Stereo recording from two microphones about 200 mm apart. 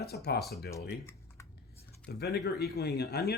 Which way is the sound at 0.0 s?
55° left (ahead or behind).